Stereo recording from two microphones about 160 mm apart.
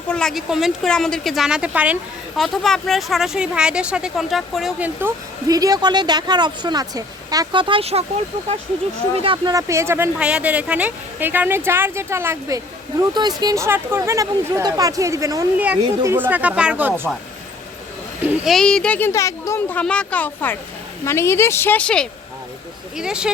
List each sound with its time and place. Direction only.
0.1 s speech: 5° left (ahead or behind)
4.9 s speech: 20° right (ahead or behind); by 8.0 s 40° right (ahead or behind)
9.1 s speech: 35° right (ahead or behind); by 16.9 s 10° right (ahead or behind)
18.4 s speech: centre (ahead or behind)
23.0 s speech: 5° right (ahead or behind)